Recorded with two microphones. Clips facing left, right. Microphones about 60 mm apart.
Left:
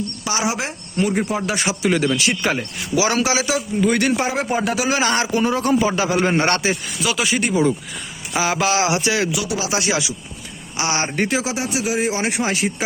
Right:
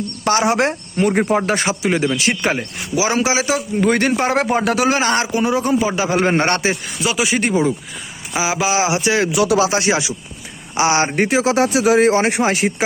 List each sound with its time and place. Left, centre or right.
0.3 s speech: right
1.8 s speech: right
3.8 s speech: right
4.3 s speech: right
4.9 s speech: right
5.3 s a man's voice: centre
6.2 s speech: right
8.3 s speech: centre; by 11.5 s right
11.5 s speech: right
11.9 s speech: right
12.2 s speech: right